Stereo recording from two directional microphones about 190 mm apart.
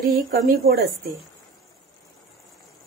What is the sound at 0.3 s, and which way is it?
Speech, 55° right (ahead or behind).